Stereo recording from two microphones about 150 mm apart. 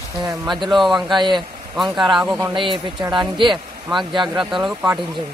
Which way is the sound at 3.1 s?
35° right (ahead or behind).